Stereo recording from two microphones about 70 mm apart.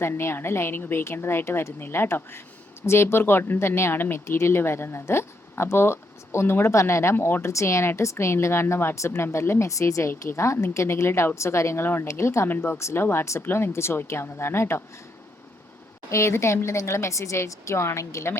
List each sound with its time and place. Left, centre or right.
0.0 s speech: left
7.5 s speech: left
16.0 s a woman's voice: left